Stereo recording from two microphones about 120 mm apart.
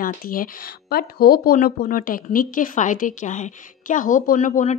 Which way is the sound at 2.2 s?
90° left.